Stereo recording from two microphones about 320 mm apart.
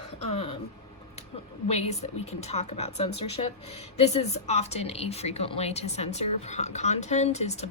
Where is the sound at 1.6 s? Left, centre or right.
Centre.